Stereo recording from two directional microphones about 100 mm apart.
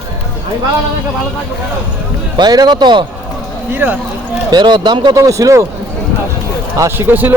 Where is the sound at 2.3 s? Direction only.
45° right (ahead or behind).